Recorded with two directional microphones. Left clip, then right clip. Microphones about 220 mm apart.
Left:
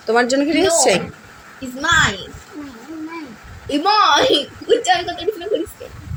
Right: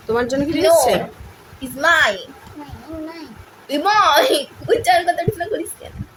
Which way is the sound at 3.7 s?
30° right (ahead or behind).